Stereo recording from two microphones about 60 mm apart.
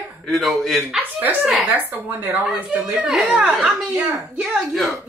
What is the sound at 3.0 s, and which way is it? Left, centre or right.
Speech, centre.